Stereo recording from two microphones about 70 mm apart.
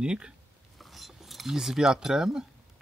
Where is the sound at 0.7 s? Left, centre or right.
Centre.